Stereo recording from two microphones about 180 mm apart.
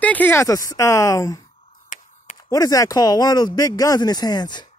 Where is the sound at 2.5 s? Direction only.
20° left (ahead or behind).